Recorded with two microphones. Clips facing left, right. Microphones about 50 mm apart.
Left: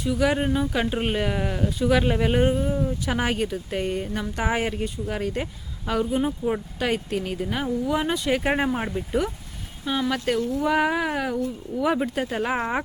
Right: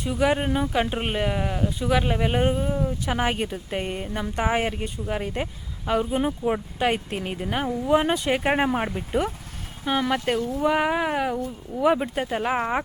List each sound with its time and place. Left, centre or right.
0.0 s speech: right
3.3 s speech: right
8.5 s speech: centre; by 10.2 s right
10.6 s speech: centre